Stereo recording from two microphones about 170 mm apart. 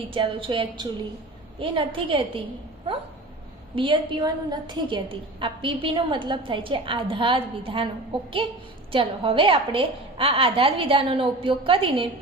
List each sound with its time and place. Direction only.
0.1 s a woman's voice: 30° right (ahead or behind)
3.8 s a woman's voice: 30° right (ahead or behind)
8.9 s a woman's voice: 30° right (ahead or behind)